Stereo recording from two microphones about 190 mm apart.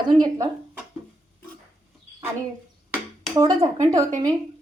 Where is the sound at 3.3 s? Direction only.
20° right (ahead or behind).